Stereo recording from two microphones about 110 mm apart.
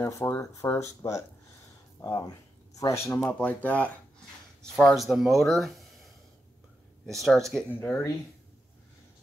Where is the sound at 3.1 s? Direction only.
15° left (ahead or behind).